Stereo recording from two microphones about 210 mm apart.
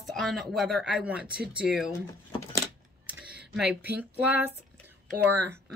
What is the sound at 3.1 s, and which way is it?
Computer keyboard, 5° right (ahead or behind).